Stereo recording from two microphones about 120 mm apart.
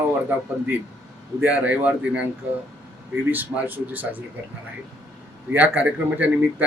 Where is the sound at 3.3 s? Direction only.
15° right (ahead or behind).